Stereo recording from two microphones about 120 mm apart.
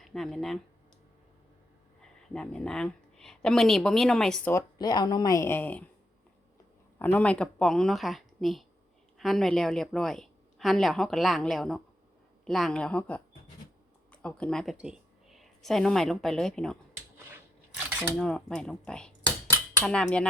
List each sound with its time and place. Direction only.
0.0 s speech: centre (ahead or behind)
2.0 s a woman's voice: 5° left (ahead or behind)
4.5 s speech: 35° left (ahead or behind); by 5.8 s 15° left (ahead or behind)
7.0 s a woman's voice: 10° left (ahead or behind)
18.2 s a woman's voice: 5° left (ahead or behind)